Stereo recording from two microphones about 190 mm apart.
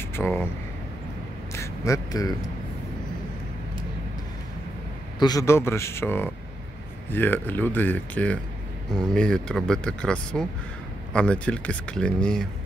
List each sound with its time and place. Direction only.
0.1 s speech: 10° left (ahead or behind)
1.5 s speech: 15° left (ahead or behind)
5.2 s speech: 20° left (ahead or behind)